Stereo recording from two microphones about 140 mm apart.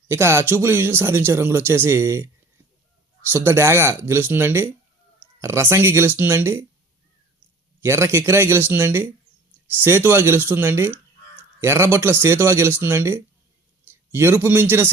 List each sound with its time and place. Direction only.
0.1 s speech: 15° right (ahead or behind)
3.3 s speech: 20° right (ahead or behind)
7.8 s a man's voice: 20° right (ahead or behind)